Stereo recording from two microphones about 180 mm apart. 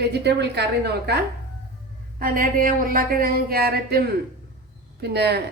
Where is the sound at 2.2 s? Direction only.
50° right (ahead or behind).